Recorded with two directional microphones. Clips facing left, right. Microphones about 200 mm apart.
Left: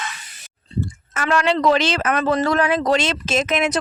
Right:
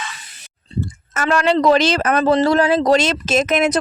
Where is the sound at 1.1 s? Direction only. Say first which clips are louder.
Right 3 dB; 40° right (ahead or behind).